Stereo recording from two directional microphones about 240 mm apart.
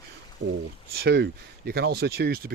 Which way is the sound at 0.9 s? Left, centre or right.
Right.